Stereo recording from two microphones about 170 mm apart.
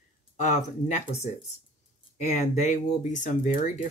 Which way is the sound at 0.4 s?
45° left (ahead or behind).